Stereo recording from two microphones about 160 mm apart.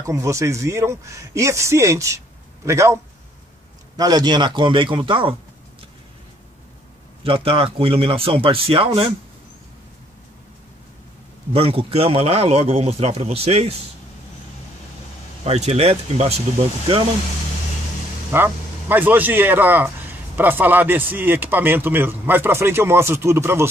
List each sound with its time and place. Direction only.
0.0 s a man's voice: 20° right (ahead or behind)
7.2 s speech: 35° right (ahead or behind)
11.5 s speech: 35° right (ahead or behind)
15.4 s speech: 40° right (ahead or behind)
18.3 s a man's voice: 15° right (ahead or behind)